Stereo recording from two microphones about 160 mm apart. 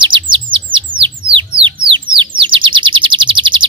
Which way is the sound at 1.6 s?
30° right (ahead or behind).